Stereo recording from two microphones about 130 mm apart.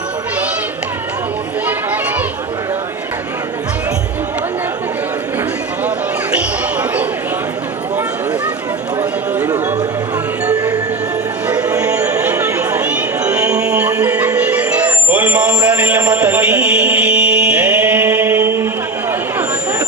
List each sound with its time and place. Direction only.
1.6 s children playing: 10° right (ahead or behind)
6.3 s basketball bounce: 10° right (ahead or behind)
10.4 s music: 25° right (ahead or behind)
11.4 s music: 10° right (ahead or behind)
12.2 s a sound: 15° right (ahead or behind)
13.3 s music: 10° right (ahead or behind)